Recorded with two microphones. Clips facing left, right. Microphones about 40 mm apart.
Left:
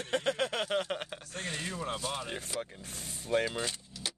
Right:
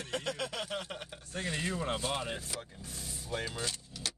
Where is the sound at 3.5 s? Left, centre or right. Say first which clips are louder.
Left 2 dB; left.